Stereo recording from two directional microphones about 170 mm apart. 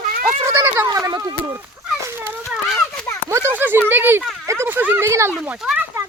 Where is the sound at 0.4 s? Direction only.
15° right (ahead or behind).